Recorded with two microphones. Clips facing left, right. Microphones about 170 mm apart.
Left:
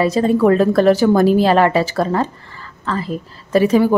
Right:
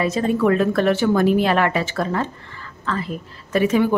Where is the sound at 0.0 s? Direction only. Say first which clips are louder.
Left 5 dB; 35° left (ahead or behind).